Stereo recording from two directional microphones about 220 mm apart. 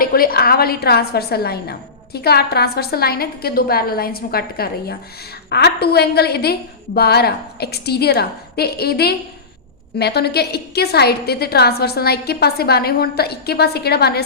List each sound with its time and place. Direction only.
0.0 s a woman's voice: 40° left (ahead or behind)